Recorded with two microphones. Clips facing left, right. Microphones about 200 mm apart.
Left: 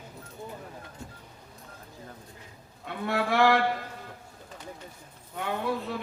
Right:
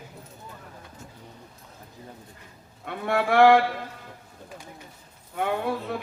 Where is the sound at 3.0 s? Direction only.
50° right (ahead or behind).